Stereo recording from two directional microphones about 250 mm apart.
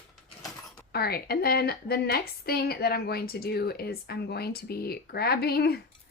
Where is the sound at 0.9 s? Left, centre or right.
Left.